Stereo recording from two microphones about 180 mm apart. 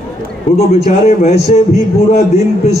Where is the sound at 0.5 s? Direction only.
40° left (ahead or behind).